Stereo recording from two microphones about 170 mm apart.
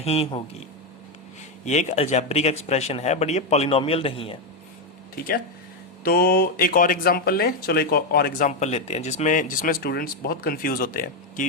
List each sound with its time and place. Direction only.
0.0 s speech: 35° left (ahead or behind)
1.6 s speech: 45° left (ahead or behind)
5.1 s speech: 60° left (ahead or behind)